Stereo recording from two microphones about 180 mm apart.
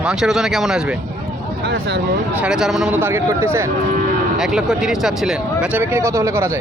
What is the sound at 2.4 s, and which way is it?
Speech, 5° right (ahead or behind).